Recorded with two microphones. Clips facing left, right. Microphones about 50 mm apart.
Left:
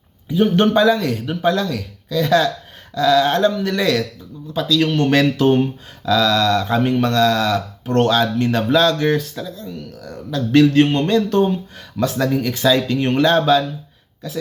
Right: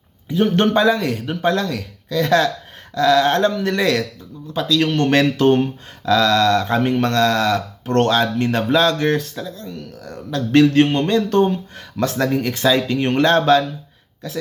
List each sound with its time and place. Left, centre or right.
0.3 s a man's voice: right
0.6 s speech: right
1.4 s speech: right
3.7 s speech: right
10.9 s speech: right
11.3 s speech: right